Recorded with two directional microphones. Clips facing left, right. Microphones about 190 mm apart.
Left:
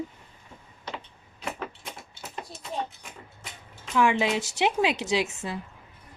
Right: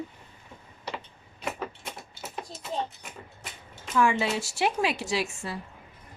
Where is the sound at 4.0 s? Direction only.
15° left (ahead or behind).